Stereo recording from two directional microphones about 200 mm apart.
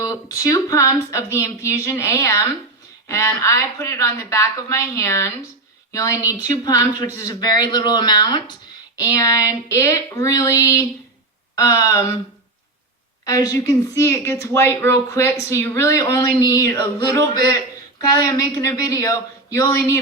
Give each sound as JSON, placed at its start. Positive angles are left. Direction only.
{"t": 0.0, "sound": "a woman's voice", "side_deg": 15}
{"t": 13.2, "sound": "speech", "side_deg": 15}